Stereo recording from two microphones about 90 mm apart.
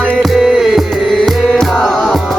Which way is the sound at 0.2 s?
5° right (ahead or behind).